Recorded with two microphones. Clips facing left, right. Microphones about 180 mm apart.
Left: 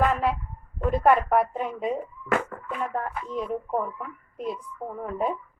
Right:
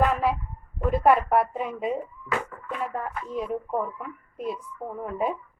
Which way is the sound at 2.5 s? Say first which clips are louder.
Left 4 dB; 55° left (ahead or behind).